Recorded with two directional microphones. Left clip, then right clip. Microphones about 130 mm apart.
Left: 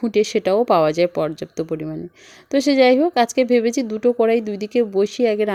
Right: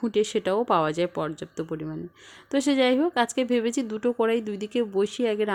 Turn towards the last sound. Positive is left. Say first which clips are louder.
# left 7 dB
turn(degrees=25)  # may be behind; listen again after turning